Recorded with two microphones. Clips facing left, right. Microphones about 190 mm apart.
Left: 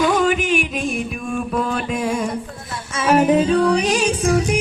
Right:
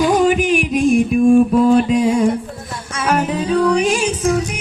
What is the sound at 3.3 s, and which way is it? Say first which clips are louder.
Music: even; 25° left (ahead or behind).